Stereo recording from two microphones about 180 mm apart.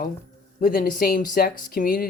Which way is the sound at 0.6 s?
50° left (ahead or behind).